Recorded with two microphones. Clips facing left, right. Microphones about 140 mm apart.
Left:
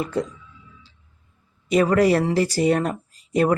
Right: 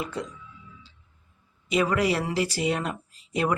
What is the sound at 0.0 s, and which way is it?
Speech, 40° left (ahead or behind).